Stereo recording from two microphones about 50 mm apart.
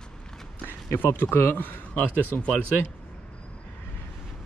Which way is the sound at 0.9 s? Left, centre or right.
Left.